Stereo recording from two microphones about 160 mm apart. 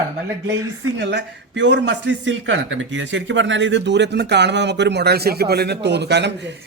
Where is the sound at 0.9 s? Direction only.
90° right.